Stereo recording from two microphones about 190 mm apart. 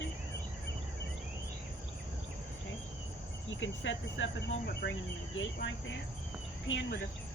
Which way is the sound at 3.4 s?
85° left.